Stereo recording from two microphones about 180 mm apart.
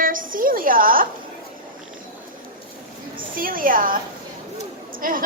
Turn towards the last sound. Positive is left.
turn(degrees=-50)  # may be behind; listen again after turning